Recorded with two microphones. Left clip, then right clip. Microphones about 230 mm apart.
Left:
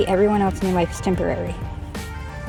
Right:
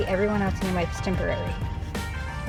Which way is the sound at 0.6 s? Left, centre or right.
Centre.